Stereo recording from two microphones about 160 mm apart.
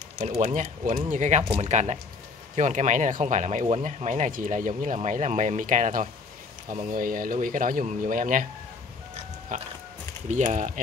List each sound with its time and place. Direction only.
0.2 s speech: 45° right (ahead or behind)
9.5 s speech: 50° right (ahead or behind)